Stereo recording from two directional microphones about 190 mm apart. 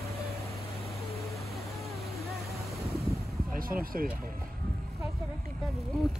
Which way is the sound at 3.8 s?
50° right (ahead or behind).